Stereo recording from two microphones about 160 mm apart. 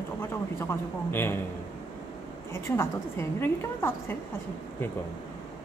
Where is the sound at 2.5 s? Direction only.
15° left (ahead or behind).